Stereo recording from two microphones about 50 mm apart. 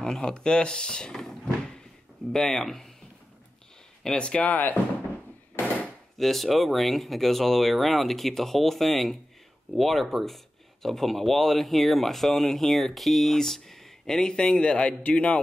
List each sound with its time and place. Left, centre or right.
0.0 s speech: centre
4.0 s speech: centre
6.1 s speech: centre; by 15.3 s left